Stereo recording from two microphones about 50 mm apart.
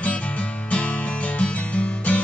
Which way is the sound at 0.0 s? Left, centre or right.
Left.